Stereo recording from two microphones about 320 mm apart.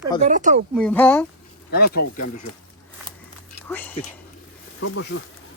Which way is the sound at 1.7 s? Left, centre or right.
Left.